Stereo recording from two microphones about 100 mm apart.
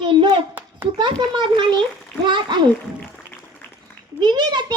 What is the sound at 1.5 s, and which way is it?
A child's voice, 50° right (ahead or behind).